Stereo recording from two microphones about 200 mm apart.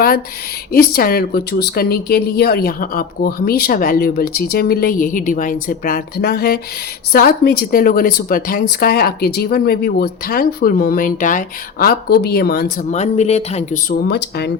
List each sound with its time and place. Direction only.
0.7 s a woman's voice: 50° left (ahead or behind)
12.9 s speech: 35° left (ahead or behind)
14.0 s speech: 55° left (ahead or behind)